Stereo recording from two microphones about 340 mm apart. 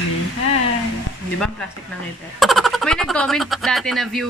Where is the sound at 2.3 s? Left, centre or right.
Centre.